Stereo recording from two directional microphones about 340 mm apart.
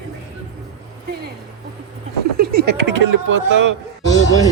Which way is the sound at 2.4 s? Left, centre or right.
Right.